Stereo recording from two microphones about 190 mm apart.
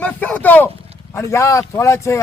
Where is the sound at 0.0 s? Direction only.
10° left (ahead or behind).